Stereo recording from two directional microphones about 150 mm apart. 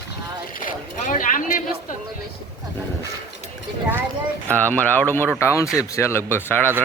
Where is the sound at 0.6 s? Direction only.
65° left (ahead or behind).